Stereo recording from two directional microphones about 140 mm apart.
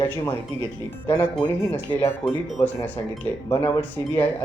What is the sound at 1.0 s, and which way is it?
Speech, 10° left (ahead or behind).